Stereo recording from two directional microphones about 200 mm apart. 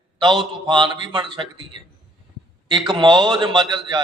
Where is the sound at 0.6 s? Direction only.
20° right (ahead or behind).